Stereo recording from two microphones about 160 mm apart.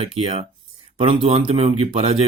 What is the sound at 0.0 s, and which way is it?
Speech, 35° right (ahead or behind).